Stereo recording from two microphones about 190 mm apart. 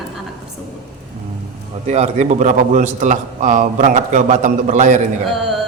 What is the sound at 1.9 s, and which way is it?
A man's voice, 35° right (ahead or behind).